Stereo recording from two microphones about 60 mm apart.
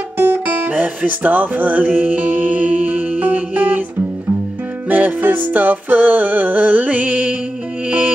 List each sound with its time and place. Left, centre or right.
0.2 s guitar: right
0.7 s music: right
4.8 s music: right